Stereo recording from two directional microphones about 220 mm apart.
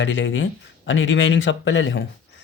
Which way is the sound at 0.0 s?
55° left (ahead or behind).